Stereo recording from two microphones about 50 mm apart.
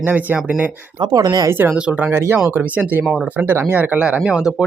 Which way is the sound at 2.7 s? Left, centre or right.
Right.